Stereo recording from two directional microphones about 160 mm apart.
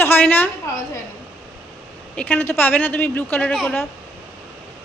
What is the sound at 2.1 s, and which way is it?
A woman's voice, 10° left (ahead or behind).